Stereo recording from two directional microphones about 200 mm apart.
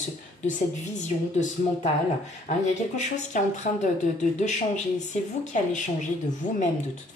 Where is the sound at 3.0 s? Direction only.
35° left (ahead or behind).